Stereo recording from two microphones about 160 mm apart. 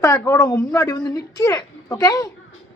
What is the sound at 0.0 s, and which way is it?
A woman's voice, 20° left (ahead or behind).